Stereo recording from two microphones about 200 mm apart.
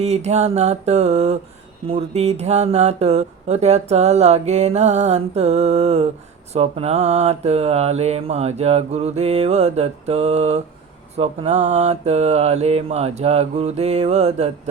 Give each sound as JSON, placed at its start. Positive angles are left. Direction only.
{"t": 0.0, "sound": "speech", "side_deg": -35}